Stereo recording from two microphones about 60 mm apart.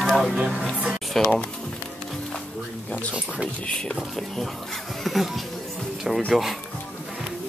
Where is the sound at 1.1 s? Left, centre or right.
Centre.